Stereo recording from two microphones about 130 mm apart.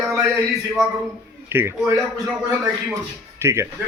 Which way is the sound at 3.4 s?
20° right (ahead or behind).